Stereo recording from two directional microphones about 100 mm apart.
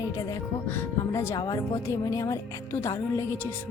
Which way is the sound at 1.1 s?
30° left (ahead or behind).